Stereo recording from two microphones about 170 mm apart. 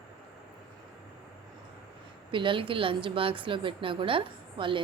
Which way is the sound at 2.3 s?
30° right (ahead or behind).